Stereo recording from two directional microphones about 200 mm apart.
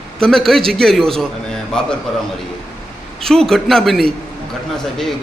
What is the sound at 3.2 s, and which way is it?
Speech, centre (ahead or behind).